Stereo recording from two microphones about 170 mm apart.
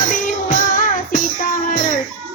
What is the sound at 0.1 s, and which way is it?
Music, 50° left (ahead or behind).